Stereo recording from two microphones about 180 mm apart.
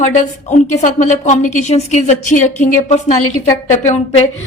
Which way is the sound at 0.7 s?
40° left (ahead or behind).